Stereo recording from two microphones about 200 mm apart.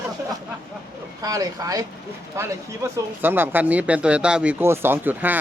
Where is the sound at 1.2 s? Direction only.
15° right (ahead or behind).